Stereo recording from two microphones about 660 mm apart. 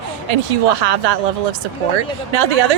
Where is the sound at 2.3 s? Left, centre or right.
Right.